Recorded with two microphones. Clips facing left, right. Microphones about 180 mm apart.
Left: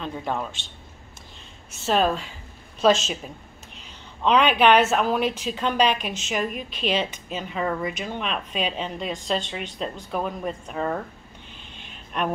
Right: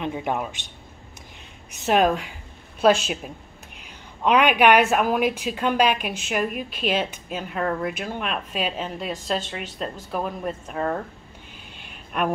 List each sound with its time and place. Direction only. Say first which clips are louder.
0.0 s a woman's voice: right 2 dB; 15° right (ahead or behind)
1.7 s a woman's voice: right 2 dB; 15° right (ahead or behind)
11.7 s a sound: right 1 dB; 5° right (ahead or behind)